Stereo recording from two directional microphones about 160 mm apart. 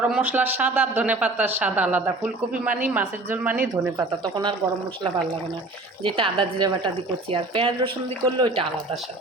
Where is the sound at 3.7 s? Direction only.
25° right (ahead or behind).